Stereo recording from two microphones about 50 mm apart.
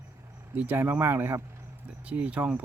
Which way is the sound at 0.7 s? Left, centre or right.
Right.